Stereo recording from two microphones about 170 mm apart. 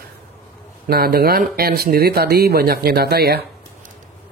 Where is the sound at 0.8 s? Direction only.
60° right (ahead or behind).